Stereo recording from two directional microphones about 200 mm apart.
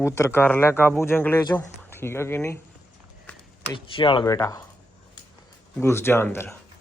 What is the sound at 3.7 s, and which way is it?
Speech, 25° left (ahead or behind).